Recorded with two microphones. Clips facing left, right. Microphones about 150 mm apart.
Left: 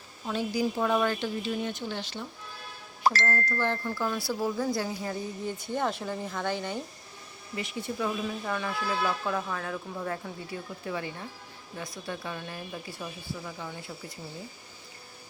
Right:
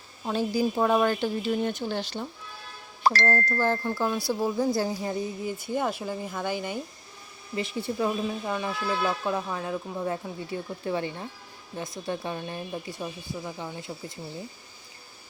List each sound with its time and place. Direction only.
0.3 s speech: 35° right (ahead or behind)
3.0 s music: 70° right (ahead or behind)
3.3 s speech: 45° right (ahead or behind); by 5.1 s 25° right (ahead or behind)
5.5 s speech: 5° right (ahead or behind)
7.5 s speech: 30° right (ahead or behind)
8.4 s speech: 20° right (ahead or behind)